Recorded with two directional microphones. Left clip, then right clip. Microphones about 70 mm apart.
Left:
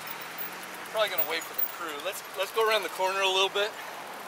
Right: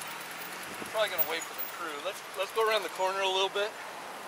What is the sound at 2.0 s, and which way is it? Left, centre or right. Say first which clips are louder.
Speech: left 3 dB; left.